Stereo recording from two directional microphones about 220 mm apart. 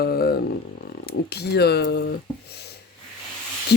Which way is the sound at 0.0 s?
45° left (ahead or behind).